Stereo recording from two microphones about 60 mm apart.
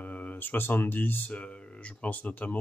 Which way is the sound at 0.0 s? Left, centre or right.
Left.